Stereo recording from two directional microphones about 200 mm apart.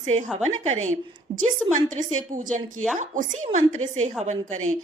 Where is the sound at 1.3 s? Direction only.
20° right (ahead or behind).